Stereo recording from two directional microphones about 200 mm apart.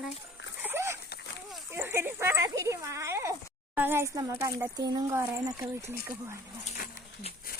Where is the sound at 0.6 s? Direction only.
15° right (ahead or behind).